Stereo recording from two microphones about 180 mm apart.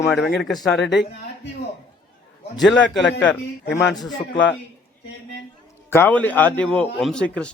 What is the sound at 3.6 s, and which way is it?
Speech, 70° left (ahead or behind).